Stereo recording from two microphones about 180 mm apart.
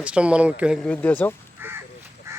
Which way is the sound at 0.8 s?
10° left (ahead or behind).